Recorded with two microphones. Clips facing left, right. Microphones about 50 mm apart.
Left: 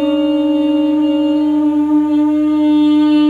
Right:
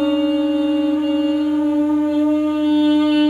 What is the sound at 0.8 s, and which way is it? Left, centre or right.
Wind instrument, centre.